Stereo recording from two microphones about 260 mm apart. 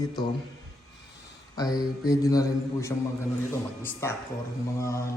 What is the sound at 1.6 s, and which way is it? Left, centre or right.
A man's voice, centre.